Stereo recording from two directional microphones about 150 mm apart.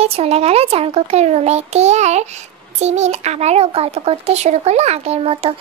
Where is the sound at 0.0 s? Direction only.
40° right (ahead or behind).